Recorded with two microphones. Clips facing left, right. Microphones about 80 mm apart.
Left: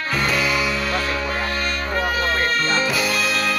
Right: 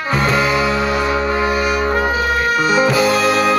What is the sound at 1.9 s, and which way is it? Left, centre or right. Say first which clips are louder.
Music: right 5 dB; right.